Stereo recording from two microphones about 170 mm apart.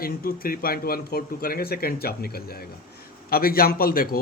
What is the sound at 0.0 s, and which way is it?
A man's voice, 60° left (ahead or behind).